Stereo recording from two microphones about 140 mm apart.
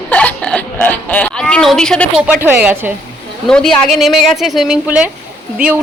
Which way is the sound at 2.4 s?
10° right (ahead or behind).